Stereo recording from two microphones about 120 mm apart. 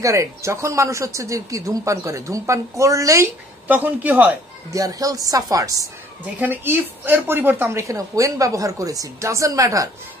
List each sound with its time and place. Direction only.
0.0 s speech: 25° right (ahead or behind)
3.6 s a woman's voice: 15° right (ahead or behind)
4.7 s speech: 30° right (ahead or behind)
6.4 s speech: 15° right (ahead or behind)